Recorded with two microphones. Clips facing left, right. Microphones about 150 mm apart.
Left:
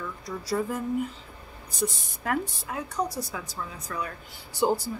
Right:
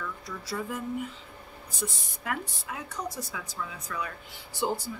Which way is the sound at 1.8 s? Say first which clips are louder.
Left 7 dB; 40° left (ahead or behind).